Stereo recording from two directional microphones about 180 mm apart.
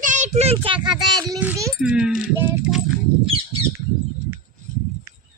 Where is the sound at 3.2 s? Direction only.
30° right (ahead or behind).